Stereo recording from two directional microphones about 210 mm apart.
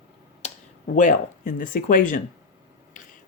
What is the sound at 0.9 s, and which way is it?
Speech, 35° left (ahead or behind).